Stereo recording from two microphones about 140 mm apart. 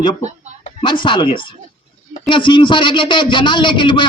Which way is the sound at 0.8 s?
35° left (ahead or behind).